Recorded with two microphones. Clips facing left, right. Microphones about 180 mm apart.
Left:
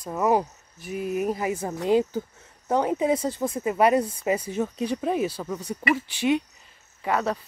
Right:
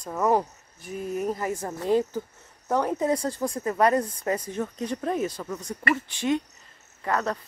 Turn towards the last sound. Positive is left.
turn(degrees=10)  # may be behind; listen again after turning